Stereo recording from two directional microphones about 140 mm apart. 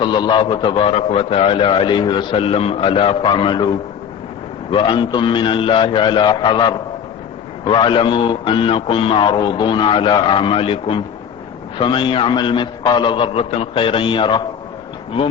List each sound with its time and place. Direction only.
0.0 s a man's voice: 30° left (ahead or behind)